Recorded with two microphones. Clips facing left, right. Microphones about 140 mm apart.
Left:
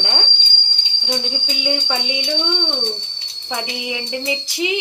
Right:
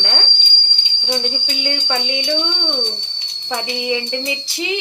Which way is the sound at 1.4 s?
10° left (ahead or behind).